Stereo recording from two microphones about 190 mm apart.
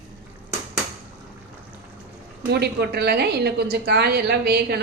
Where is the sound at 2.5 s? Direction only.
60° right (ahead or behind).